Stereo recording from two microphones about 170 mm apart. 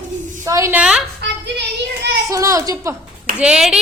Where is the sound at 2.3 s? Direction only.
20° right (ahead or behind).